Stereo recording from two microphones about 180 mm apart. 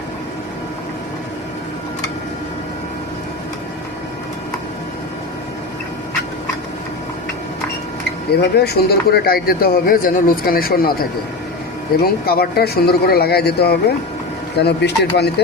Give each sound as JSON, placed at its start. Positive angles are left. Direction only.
{"t": 8.3, "sound": "speech", "side_deg": 65}
{"t": 12.0, "sound": "speech", "side_deg": 60}